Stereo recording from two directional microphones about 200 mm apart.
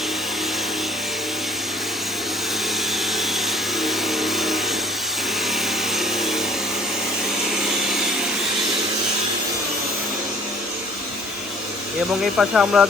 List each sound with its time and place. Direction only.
3.8 s vehicle: centre (ahead or behind)
12.4 s speech: 5° right (ahead or behind)